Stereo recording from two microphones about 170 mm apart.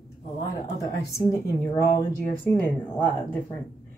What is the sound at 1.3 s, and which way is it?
Speech, 15° left (ahead or behind).